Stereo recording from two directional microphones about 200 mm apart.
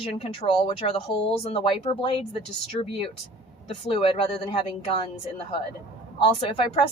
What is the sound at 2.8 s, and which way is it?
Speech, 30° left (ahead or behind).